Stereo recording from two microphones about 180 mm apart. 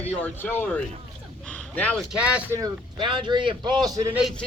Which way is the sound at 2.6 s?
25° right (ahead or behind).